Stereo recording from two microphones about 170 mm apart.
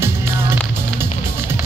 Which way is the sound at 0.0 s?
15° right (ahead or behind).